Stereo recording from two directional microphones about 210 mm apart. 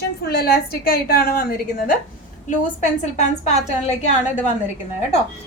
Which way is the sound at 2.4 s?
35° left (ahead or behind).